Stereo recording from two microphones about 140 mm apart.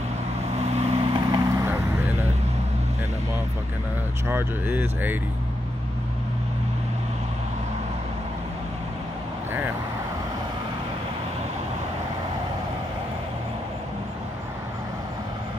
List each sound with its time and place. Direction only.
0.6 s vehicle: 50° right (ahead or behind)
1.5 s vehicle: 20° right (ahead or behind)
4.3 s speech: 15° right (ahead or behind)